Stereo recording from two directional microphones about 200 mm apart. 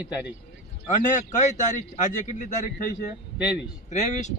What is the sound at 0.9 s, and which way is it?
Speech, 40° left (ahead or behind).